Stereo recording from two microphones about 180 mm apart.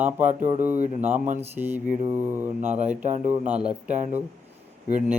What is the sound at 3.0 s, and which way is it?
Speech, 45° right (ahead or behind).